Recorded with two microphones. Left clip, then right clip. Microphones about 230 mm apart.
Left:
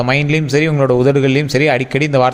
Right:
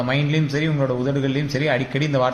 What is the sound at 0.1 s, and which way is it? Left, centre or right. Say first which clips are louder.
A man's voice: left 8 dB; left.